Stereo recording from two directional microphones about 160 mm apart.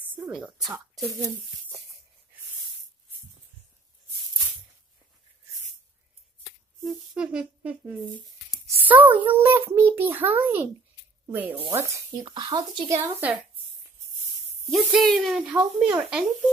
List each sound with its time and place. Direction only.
0.1 s a sound: 10° right (ahead or behind)
6.8 s a child's voice: 5° right (ahead or behind)
14.7 s speech: centre (ahead or behind)